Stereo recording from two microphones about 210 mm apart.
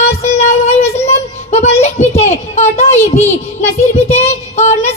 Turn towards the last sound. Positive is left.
turn(degrees=30)  # may be behind; listen again after turning